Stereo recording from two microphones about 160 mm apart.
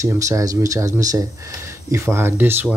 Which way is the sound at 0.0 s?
20° right (ahead or behind).